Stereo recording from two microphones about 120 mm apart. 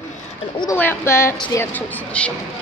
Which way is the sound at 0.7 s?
20° left (ahead or behind).